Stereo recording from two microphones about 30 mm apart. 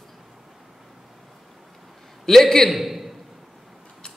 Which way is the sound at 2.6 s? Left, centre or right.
Centre.